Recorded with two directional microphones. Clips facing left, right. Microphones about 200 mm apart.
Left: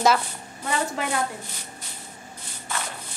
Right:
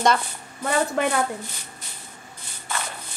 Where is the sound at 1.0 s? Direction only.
60° right (ahead or behind).